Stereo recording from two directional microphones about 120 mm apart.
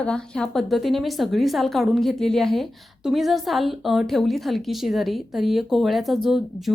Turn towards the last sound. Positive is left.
turn(degrees=0)  # may be behind; listen again after turning